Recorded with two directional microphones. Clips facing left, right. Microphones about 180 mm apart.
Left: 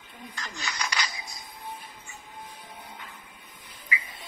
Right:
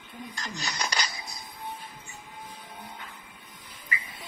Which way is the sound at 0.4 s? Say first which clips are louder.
Even; 40° right (ahead or behind).